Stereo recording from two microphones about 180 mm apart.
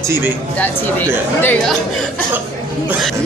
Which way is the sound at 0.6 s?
10° left (ahead or behind).